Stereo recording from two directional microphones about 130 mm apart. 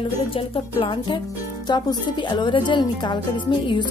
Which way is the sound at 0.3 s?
40° left (ahead or behind).